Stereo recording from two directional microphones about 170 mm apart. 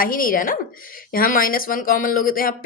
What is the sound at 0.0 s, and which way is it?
Speech, 55° left (ahead or behind).